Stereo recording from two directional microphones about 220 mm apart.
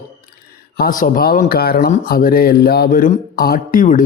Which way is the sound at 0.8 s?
40° left (ahead or behind).